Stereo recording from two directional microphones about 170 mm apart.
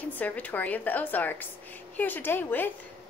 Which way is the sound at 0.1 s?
10° left (ahead or behind).